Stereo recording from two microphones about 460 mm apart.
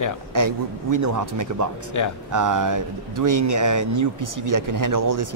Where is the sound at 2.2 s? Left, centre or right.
Right.